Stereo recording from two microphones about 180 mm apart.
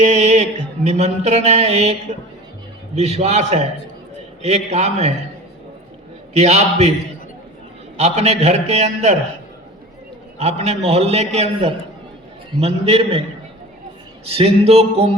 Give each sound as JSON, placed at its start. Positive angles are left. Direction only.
{"t": 0.0, "sound": "a man's voice", "side_deg": -40}
{"t": 6.3, "sound": "a man's voice", "side_deg": -35}
{"t": 7.9, "sound": "a man's voice", "side_deg": -35}
{"t": 10.3, "sound": "a man's voice", "side_deg": -35}
{"t": 14.3, "sound": "a man's voice", "side_deg": -35}